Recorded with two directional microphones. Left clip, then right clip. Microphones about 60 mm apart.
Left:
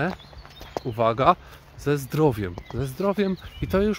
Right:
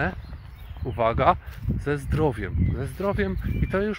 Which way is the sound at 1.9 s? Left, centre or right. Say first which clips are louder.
Left 3 dB; centre.